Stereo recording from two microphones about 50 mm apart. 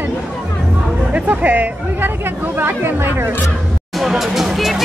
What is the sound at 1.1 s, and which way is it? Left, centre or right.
Speech, right.